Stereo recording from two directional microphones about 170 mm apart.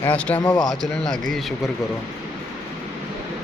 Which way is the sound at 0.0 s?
10° left (ahead or behind).